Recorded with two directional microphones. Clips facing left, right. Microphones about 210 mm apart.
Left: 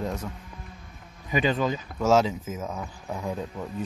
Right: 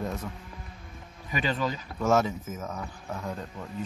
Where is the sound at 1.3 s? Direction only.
15° left (ahead or behind).